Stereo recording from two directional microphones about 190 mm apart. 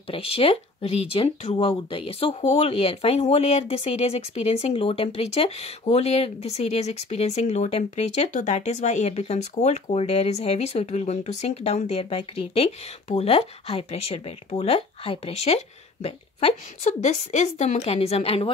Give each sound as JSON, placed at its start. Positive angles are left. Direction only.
{"t": 0.1, "sound": "speech", "side_deg": 30}